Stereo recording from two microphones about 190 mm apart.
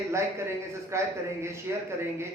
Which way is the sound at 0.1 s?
15° right (ahead or behind).